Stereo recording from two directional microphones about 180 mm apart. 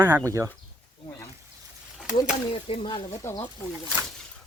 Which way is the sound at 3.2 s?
15° left (ahead or behind).